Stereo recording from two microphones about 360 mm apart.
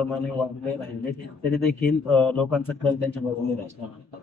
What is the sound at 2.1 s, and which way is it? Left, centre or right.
Speech, centre.